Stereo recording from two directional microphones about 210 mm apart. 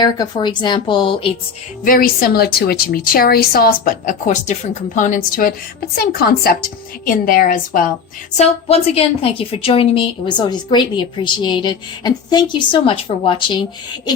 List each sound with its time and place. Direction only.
0.0 s a woman's voice: 20° left (ahead or behind)
1.8 s a woman's voice: 40° left (ahead or behind)
8.4 s a woman's voice: 30° left (ahead or behind)